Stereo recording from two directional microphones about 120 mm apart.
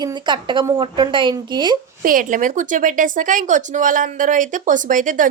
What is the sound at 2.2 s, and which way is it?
Speech, 90° right.